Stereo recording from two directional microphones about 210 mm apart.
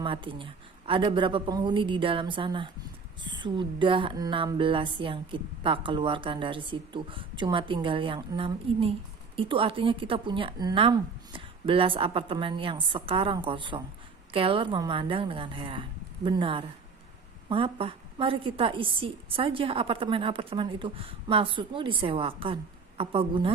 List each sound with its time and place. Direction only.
0.0 s speech: 25° right (ahead or behind)